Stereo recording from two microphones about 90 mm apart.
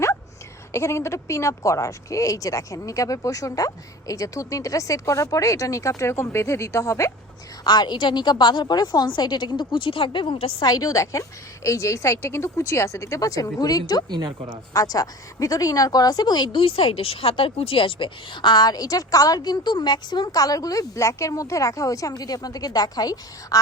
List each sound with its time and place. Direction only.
0.7 s speech: 30° left (ahead or behind)
7.6 s a woman's voice: 50° left (ahead or behind); by 10.5 s 80° left
10.6 s speech: 45° left (ahead or behind)
14.1 s speech: 65° right (ahead or behind)
14.7 s speech: 40° left (ahead or behind)
16.6 s speech: 90° left; by 23.6 s 45° left (ahead or behind)